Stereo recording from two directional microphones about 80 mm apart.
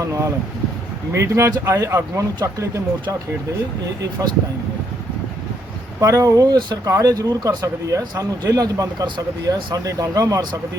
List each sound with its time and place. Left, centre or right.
0.0 s speech: right
6.0 s speech: right
6.8 s speech: right